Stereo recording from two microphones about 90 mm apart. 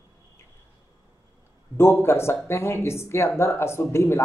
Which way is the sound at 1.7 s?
30° left (ahead or behind).